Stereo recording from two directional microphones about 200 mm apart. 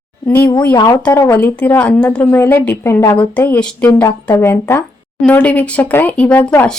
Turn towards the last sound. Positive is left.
turn(degrees=10)  # may be behind; listen again after turning